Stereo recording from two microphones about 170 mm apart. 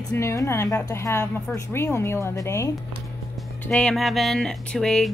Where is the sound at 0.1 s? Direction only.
15° left (ahead or behind).